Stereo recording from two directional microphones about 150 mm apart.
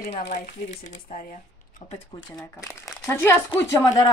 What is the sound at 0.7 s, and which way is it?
Speech, 60° left (ahead or behind).